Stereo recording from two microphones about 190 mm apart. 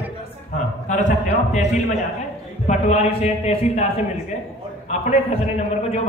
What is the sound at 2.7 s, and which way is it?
A man's voice, 35° left (ahead or behind).